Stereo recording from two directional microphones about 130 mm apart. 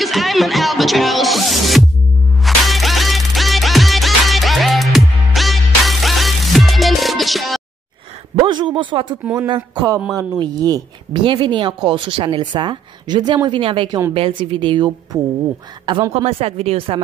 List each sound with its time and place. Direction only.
0.0 s music: centre (ahead or behind)
8.4 s a sound: 35° right (ahead or behind)
9.5 s a woman's voice: 30° right (ahead or behind)
16.1 s speech: 50° right (ahead or behind)